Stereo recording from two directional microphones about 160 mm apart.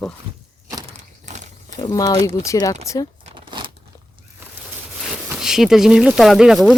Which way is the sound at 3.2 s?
30° right (ahead or behind).